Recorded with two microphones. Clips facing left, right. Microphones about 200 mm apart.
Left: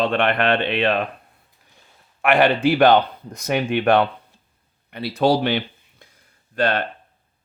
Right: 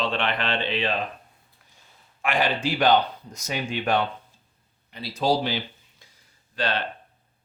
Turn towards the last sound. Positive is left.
turn(degrees=55)  # may be behind; listen again after turning